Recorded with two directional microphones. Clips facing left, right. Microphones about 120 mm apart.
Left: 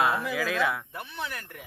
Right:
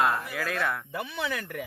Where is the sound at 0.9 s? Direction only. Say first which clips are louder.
Right 5 dB; 90° right.